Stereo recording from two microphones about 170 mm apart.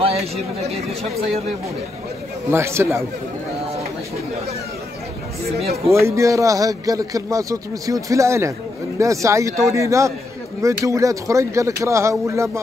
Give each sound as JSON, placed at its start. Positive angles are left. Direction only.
{"t": 0.0, "sound": "speech", "side_deg": -35}
{"t": 2.5, "sound": "speech", "side_deg": -15}
{"t": 5.9, "sound": "a man's voice", "side_deg": -15}